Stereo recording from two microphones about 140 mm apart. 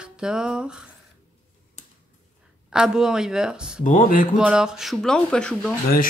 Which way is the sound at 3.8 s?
70° left (ahead or behind).